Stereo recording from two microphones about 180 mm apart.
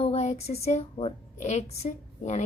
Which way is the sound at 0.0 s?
35° left (ahead or behind).